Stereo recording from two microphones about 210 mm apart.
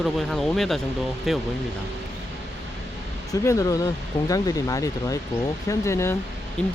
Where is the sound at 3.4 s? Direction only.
15° left (ahead or behind).